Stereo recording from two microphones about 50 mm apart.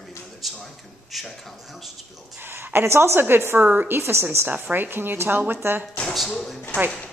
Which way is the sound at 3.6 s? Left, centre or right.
Right.